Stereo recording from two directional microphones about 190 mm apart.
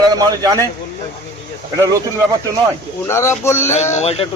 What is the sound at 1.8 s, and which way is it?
Speech, 15° right (ahead or behind).